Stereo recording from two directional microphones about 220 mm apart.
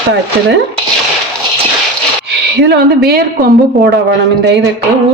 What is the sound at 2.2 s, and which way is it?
Speech, 50° right (ahead or behind).